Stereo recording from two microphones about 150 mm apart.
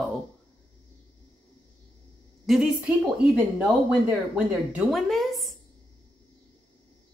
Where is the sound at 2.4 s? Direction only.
5° right (ahead or behind).